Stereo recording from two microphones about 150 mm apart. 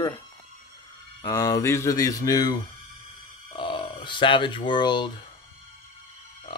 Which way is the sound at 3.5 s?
35° left (ahead or behind).